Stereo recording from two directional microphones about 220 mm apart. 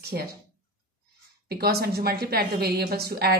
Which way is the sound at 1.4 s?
45° right (ahead or behind).